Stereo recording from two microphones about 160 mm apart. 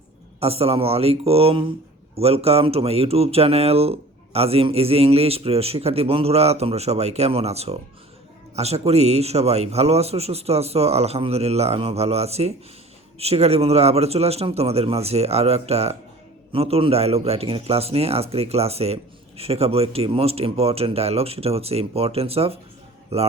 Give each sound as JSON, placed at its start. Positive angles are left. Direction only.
{"t": 0.3, "sound": "speech", "side_deg": -40}